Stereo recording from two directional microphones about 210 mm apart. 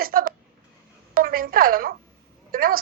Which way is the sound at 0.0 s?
45° right (ahead or behind).